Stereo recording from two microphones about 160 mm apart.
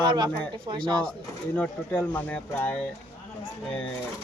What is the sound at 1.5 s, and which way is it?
Speech, 10° left (ahead or behind).